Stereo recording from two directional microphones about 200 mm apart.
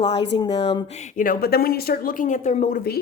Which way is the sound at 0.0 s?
20° left (ahead or behind).